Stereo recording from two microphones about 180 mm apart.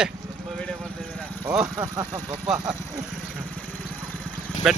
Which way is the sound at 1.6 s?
25° right (ahead or behind).